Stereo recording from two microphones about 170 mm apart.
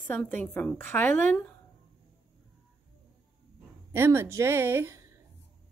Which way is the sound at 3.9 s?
15° right (ahead or behind).